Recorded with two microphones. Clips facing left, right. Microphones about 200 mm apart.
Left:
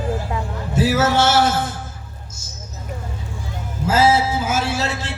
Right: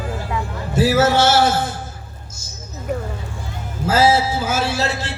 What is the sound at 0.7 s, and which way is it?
A man's voice, 35° right (ahead or behind).